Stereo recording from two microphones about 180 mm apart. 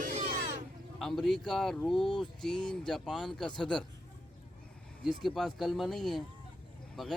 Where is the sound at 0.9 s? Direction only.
Centre (ahead or behind).